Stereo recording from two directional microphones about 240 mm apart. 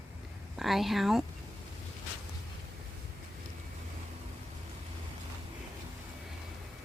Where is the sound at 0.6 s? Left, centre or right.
Centre.